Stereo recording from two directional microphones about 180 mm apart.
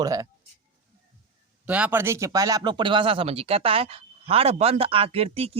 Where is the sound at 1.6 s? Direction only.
5° right (ahead or behind).